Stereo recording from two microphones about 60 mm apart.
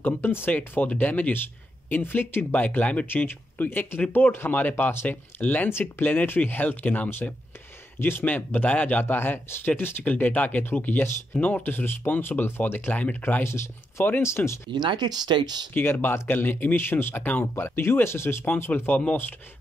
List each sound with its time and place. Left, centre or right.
0.0 s speech: left
0.5 s speech: left
5.7 s speech: left
9.0 s speech: left
13.4 s speech: left
15.7 s speech: left